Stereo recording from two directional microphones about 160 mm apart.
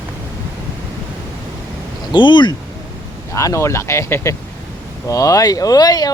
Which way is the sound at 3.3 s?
20° left (ahead or behind).